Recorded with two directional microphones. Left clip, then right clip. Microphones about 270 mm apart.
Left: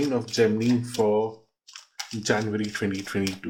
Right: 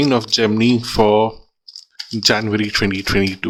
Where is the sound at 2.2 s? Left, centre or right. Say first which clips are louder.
Right 9 dB; right.